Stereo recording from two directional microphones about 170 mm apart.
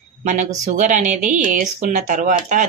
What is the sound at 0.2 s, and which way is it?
Speech, 45° right (ahead or behind).